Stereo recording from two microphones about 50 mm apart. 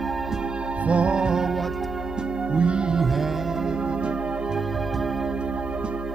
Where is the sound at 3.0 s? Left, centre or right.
Centre.